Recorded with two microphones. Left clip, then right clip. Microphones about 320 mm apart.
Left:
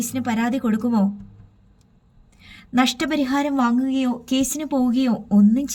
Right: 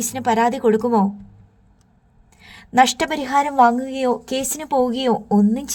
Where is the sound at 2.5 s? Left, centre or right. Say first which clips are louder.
Right 6 dB; right.